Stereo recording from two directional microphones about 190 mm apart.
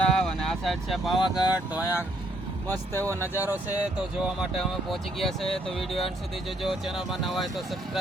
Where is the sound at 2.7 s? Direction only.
15° right (ahead or behind).